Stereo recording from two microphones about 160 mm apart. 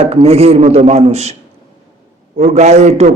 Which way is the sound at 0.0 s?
40° right (ahead or behind).